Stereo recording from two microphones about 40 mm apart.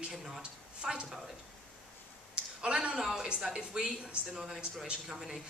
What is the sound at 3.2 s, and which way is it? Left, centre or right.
Speech, centre.